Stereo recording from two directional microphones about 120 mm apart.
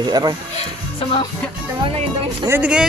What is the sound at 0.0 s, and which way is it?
Speech, 35° right (ahead or behind).